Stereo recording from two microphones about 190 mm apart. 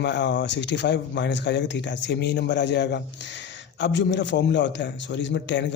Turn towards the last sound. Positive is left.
turn(degrees=70)  # may be behind; listen again after turning